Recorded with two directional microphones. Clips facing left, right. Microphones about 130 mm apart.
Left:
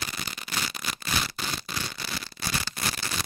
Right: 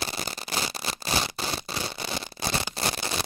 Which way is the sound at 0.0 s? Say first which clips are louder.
Right 4 dB; 35° right (ahead or behind).